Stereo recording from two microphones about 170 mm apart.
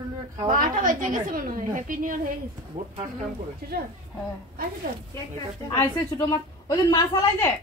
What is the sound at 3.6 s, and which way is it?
Speech, 65° right (ahead or behind).